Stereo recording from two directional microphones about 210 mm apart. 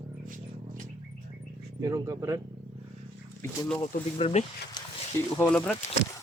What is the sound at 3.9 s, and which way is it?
Speech, 30° left (ahead or behind).